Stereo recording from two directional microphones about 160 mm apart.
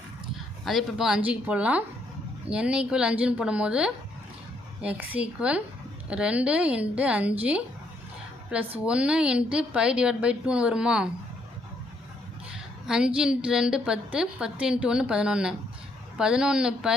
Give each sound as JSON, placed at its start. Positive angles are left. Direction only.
{"t": 0.6, "sound": "a woman's voice", "side_deg": 0}
{"t": 8.8, "sound": "a woman's voice", "side_deg": -5}
{"t": 12.9, "sound": "a woman's voice", "side_deg": -5}